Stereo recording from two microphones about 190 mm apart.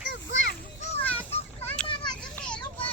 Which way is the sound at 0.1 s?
80° left.